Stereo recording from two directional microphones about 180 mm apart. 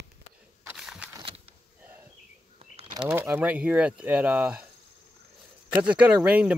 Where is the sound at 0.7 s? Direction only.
5° right (ahead or behind).